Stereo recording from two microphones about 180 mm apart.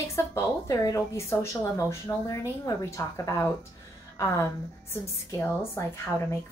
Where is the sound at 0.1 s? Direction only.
15° left (ahead or behind).